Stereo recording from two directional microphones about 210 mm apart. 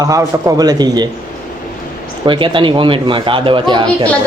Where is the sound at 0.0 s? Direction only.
15° right (ahead or behind).